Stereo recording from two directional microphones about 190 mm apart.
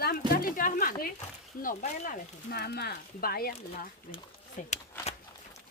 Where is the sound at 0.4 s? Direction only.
45° left (ahead or behind).